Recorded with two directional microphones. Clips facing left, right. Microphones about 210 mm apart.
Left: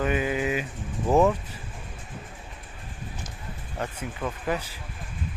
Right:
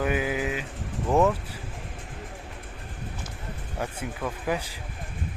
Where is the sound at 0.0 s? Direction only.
10° right (ahead or behind).